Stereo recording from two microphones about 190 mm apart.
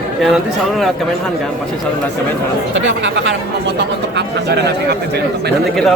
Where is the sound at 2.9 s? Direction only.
70° right (ahead or behind).